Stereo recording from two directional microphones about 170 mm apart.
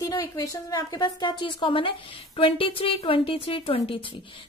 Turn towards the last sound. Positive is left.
turn(degrees=30)  # may be behind; listen again after turning